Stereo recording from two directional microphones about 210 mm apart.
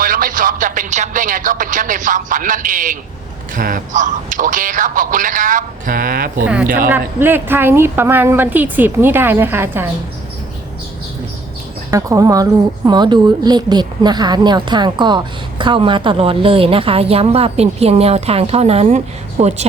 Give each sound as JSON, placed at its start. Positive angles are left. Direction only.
{"t": 0.0, "sound": "speech", "side_deg": -40}
{"t": 6.4, "sound": "a woman's voice", "side_deg": -5}
{"t": 11.9, "sound": "speech", "side_deg": -15}